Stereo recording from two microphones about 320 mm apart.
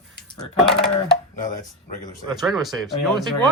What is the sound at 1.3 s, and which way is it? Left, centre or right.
Speech, left.